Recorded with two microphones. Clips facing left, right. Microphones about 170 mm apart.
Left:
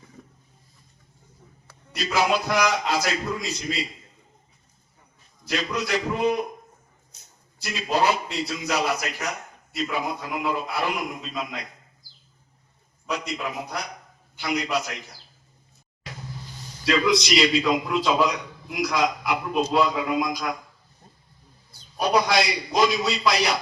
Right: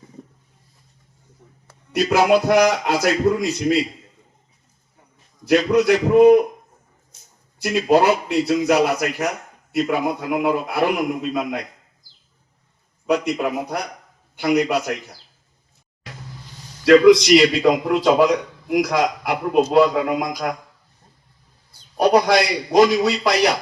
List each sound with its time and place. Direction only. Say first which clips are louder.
1.9 s a man's voice: right 8 dB; 55° right (ahead or behind)
5.5 s a man's voice: right 12 dB; 55° right (ahead or behind)
7.6 s a man's voice: right 8 dB; 55° right (ahead or behind)
13.1 s a man's voice: right 10 dB; 60° right (ahead or behind)
16.8 s a man's voice: right 11 dB; 60° right (ahead or behind)
21.9 s a man's voice: right 6 dB; 65° right (ahead or behind)